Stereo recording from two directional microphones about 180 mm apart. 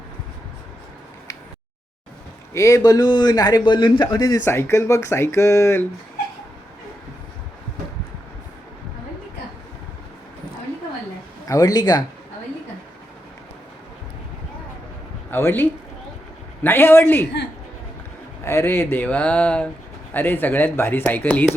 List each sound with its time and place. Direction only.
2.5 s a man's voice: 15° left (ahead or behind)
11.4 s speech: 20° left (ahead or behind)
15.3 s a man's voice: 10° left (ahead or behind)
18.4 s a man's voice: 15° left (ahead or behind)